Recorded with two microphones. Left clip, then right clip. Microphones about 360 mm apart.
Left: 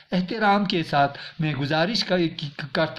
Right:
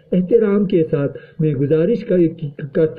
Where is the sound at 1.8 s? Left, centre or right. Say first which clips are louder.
Right 7 dB; left.